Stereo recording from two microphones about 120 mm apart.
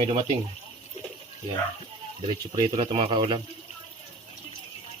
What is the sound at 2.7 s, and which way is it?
Speech, 50° right (ahead or behind).